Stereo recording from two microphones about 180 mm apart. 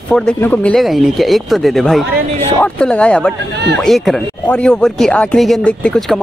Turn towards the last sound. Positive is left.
turn(degrees=5)  # may be behind; listen again after turning